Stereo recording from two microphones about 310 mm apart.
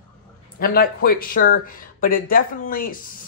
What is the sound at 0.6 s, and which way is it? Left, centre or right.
Speech, left.